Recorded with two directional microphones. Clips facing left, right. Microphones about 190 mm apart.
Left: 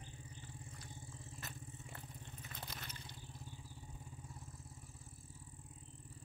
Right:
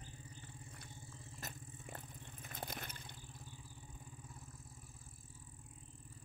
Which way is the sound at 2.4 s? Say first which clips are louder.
Right 6 dB; 50° right (ahead or behind).